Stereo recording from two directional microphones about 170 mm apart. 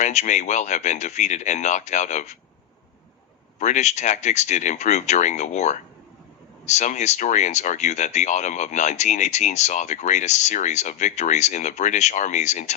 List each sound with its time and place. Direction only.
0.0 s speech: 45° left (ahead or behind)
3.6 s speech: 45° left (ahead or behind)